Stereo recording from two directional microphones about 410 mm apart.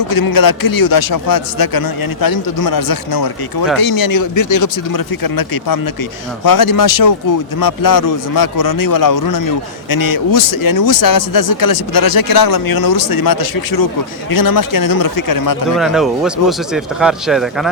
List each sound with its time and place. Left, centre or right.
0.1 s speech: left
15.7 s speech: centre